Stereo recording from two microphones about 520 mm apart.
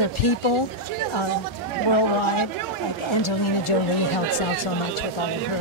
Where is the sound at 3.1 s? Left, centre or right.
Left.